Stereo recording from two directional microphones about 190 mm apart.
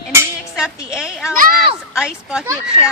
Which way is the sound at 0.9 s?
5° right (ahead or behind).